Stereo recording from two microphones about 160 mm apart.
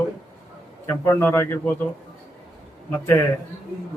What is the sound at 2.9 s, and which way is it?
Speech, 15° left (ahead or behind).